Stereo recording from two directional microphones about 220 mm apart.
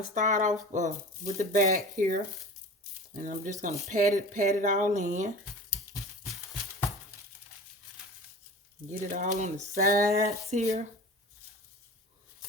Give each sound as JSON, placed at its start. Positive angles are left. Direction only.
{"t": 0.1, "sound": "speech", "side_deg": -35}
{"t": 8.9, "sound": "speech", "side_deg": -35}